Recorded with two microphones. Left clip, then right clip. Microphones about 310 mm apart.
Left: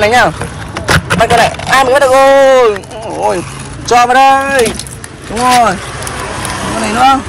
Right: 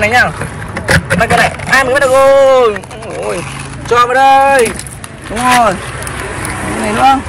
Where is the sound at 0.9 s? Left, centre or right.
Centre.